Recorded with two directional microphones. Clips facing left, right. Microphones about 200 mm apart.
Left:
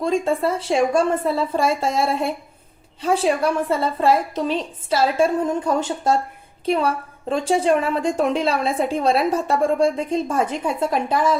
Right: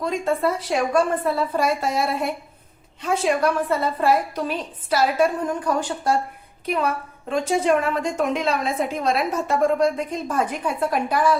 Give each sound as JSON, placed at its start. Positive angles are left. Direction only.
{"t": 0.0, "sound": "a woman's voice", "side_deg": 30}